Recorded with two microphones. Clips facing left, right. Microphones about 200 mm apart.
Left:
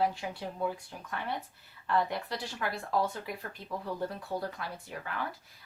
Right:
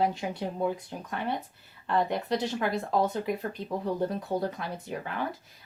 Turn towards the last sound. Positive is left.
turn(degrees=-25)  # may be behind; listen again after turning